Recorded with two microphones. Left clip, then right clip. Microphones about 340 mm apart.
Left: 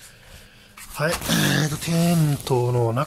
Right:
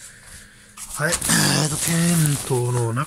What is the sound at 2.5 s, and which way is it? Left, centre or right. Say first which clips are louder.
Speech: left 4 dB; centre.